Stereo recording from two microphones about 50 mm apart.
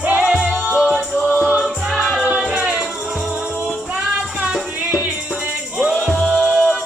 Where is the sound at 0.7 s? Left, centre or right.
Left.